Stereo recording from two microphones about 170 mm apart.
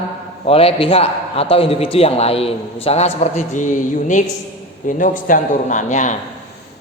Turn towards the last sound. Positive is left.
turn(degrees=45)  # may be behind; listen again after turning